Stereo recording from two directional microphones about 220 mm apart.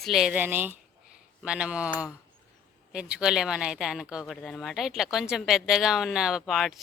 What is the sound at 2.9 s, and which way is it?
Speech, 5° right (ahead or behind).